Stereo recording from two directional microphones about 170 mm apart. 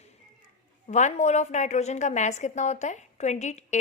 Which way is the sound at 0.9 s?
45° left (ahead or behind).